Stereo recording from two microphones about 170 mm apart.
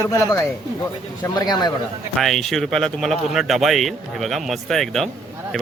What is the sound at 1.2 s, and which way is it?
Speech, 25° left (ahead or behind).